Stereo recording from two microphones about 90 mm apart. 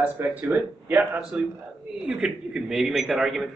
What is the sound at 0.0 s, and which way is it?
Speech, 15° right (ahead or behind).